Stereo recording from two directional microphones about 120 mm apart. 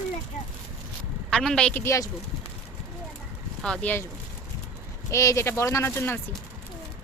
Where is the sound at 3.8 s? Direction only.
10° left (ahead or behind).